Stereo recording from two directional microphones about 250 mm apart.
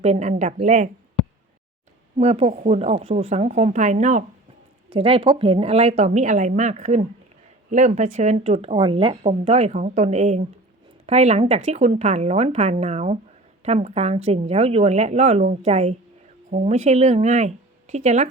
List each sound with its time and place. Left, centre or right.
0.0 s speech: right
2.1 s speech: right